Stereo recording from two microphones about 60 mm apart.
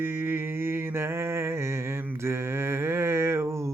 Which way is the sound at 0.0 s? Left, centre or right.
Right.